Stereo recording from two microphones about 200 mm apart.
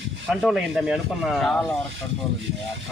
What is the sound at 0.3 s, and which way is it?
Speech, centre (ahead or behind).